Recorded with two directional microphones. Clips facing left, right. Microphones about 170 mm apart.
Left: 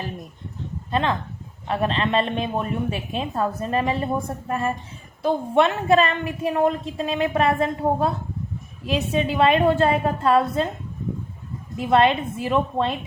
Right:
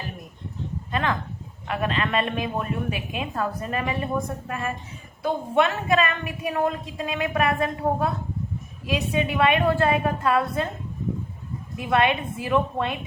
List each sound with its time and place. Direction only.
0.9 s a woman's voice: 30° left (ahead or behind)
11.9 s a woman's voice: 25° left (ahead or behind)